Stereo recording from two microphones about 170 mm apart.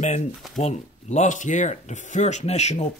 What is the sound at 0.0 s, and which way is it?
Speech, 45° left (ahead or behind).